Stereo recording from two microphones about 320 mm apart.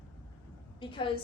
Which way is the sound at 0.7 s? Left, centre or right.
Centre.